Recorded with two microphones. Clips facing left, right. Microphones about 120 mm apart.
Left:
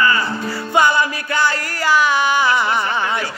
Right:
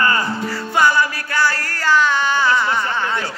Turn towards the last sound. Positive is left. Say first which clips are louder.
# left 1 dB
turn(degrees=15)  # may be behind; listen again after turning